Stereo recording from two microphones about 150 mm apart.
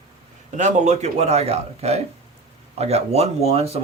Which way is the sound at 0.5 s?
50° right (ahead or behind).